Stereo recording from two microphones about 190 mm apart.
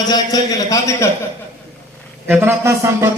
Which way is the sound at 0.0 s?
20° left (ahead or behind).